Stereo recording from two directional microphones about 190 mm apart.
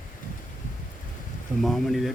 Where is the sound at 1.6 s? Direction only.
Centre (ahead or behind).